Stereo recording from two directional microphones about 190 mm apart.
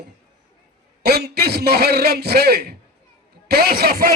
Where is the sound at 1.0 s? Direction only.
55° right (ahead or behind).